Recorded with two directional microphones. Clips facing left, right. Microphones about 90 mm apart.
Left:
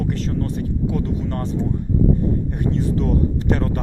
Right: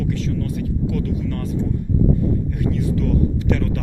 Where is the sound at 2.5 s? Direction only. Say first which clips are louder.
Even; 35° left (ahead or behind).